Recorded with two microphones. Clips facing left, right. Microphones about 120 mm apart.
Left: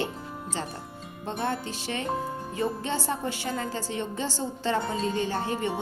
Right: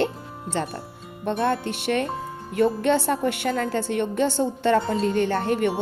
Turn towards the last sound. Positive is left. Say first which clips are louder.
# right 6 dB
turn(degrees=-65)  # may be behind; listen again after turning